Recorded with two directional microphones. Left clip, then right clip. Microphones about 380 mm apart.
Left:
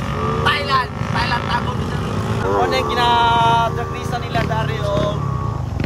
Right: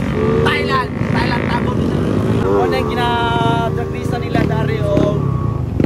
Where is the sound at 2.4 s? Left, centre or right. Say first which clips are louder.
Even; left.